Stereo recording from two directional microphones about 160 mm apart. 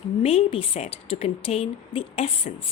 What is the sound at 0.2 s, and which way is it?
A woman's voice, 40° left (ahead or behind).